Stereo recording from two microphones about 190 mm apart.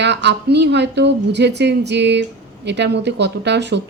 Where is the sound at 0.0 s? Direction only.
65° right (ahead or behind).